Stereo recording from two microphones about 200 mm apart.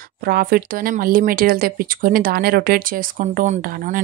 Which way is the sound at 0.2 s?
45° right (ahead or behind).